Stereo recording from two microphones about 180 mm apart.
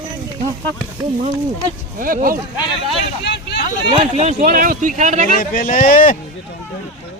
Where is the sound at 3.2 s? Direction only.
70° left (ahead or behind).